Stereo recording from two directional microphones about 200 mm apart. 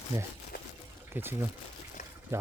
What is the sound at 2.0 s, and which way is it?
Trickle, 40° left (ahead or behind).